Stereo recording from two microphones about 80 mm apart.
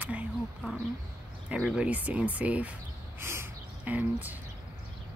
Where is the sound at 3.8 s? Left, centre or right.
Right.